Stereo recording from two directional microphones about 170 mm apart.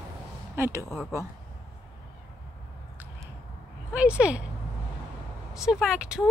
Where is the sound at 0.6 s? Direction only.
15° right (ahead or behind).